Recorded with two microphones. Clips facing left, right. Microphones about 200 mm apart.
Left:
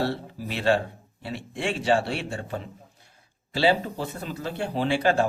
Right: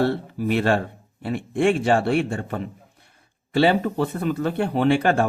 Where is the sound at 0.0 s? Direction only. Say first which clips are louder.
Right 6 dB; 55° right (ahead or behind).